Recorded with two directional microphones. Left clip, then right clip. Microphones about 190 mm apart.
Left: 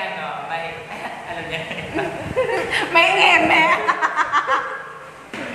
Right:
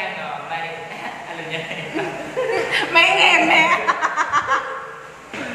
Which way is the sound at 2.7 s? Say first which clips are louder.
Right 1 dB; 10° left (ahead or behind).